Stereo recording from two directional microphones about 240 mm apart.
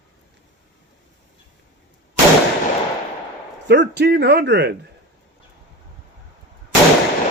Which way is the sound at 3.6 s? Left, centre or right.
Right.